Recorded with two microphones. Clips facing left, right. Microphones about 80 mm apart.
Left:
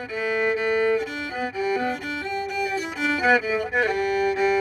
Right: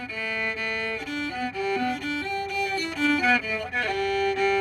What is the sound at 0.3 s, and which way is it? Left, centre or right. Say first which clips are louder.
Music: left 9 dB; centre.